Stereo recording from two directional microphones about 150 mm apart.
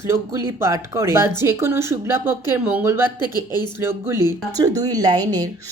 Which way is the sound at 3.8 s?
15° right (ahead or behind).